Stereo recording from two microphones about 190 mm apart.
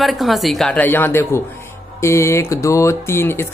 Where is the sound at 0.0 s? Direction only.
Centre (ahead or behind).